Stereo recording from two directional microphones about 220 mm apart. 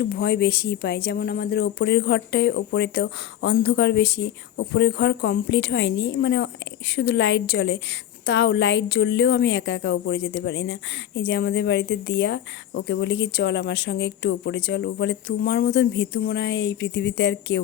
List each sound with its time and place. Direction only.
0.0 s speech: 45° left (ahead or behind)